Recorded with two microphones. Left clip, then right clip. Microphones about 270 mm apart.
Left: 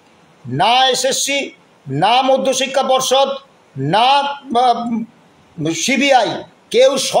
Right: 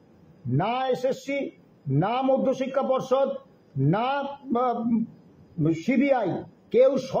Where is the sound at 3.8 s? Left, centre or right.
Left.